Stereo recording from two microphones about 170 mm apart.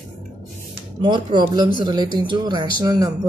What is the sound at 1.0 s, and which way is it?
Speech, 25° right (ahead or behind).